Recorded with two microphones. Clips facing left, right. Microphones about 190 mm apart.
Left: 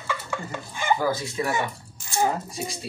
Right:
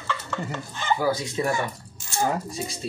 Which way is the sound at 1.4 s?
25° right (ahead or behind).